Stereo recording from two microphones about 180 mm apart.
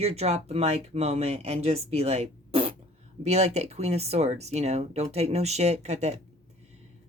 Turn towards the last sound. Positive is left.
turn(degrees=-40)  # may be behind; listen again after turning